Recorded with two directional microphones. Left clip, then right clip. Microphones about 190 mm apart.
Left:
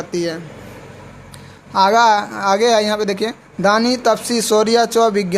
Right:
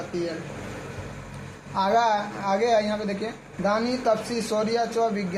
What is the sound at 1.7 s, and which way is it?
A woman's voice, 50° left (ahead or behind).